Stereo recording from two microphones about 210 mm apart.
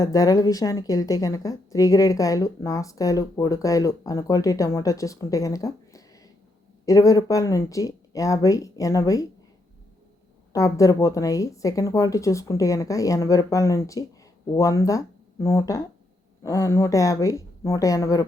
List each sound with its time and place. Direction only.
0.0 s a woman's voice: 15° left (ahead or behind)
10.5 s a woman's voice: 15° left (ahead or behind)